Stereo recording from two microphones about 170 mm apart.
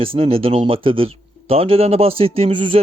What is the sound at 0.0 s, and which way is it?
Speech, 35° right (ahead or behind).